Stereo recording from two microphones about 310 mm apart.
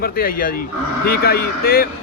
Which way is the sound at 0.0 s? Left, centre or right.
Left.